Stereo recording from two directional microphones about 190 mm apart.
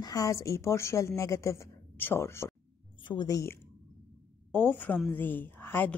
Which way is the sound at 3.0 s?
25° left (ahead or behind).